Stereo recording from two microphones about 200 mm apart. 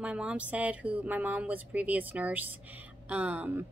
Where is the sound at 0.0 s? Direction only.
5° right (ahead or behind).